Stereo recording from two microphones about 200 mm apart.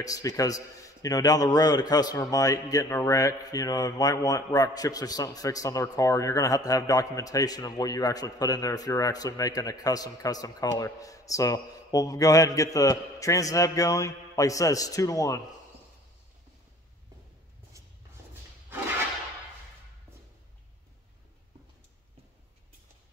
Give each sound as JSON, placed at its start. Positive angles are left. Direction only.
{"t": 0.0, "sound": "a man's voice", "side_deg": 15}